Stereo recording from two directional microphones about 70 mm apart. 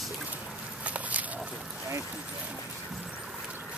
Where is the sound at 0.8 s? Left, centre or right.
Right.